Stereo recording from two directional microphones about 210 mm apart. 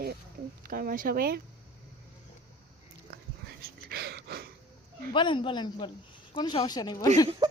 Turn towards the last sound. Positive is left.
turn(degrees=20)  # may be behind; listen again after turning